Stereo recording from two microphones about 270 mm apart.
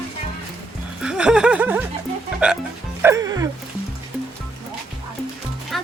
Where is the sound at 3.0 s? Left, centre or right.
Centre.